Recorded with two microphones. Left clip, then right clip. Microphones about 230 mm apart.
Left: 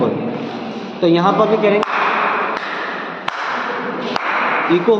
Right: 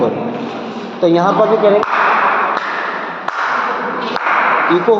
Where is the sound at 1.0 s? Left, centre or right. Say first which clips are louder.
Right 2 dB; left.